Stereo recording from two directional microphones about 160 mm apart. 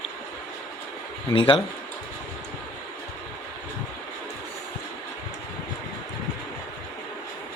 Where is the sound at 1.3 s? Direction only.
30° left (ahead or behind).